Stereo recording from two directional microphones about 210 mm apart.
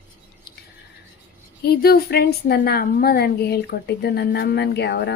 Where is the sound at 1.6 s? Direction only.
50° left (ahead or behind).